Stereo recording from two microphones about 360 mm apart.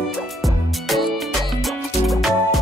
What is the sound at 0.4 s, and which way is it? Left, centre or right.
Music, centre.